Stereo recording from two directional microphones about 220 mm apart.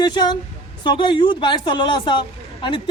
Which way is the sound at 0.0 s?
20° left (ahead or behind).